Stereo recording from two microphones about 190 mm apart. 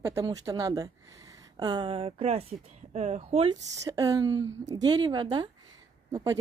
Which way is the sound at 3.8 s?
20° right (ahead or behind).